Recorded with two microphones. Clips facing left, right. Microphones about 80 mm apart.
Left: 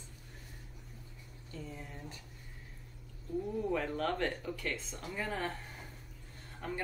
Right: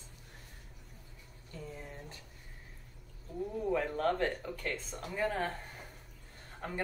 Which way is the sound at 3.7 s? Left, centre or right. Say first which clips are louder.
Right 5 dB; right.